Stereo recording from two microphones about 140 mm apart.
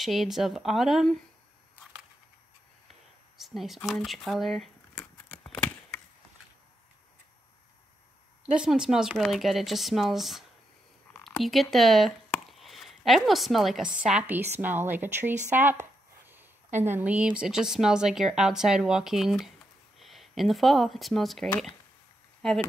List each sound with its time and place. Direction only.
0.0 s speech: centre (ahead or behind)
3.3 s speech: centre (ahead or behind)
4.9 s horse: 10° left (ahead or behind)
8.5 s speech: 5° right (ahead or behind)
15.5 s a sound: 15° right (ahead or behind)
16.8 s speech: 15° right (ahead or behind); by 22.6 s 5° left (ahead or behind)